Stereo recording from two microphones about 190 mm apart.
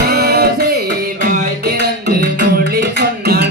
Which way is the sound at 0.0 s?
55° right (ahead or behind).